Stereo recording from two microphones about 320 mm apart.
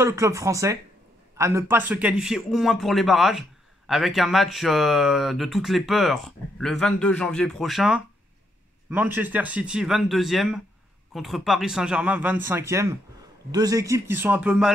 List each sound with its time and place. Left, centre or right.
0.0 s a man's voice: centre